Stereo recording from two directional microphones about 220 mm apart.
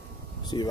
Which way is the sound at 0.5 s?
20° left (ahead or behind).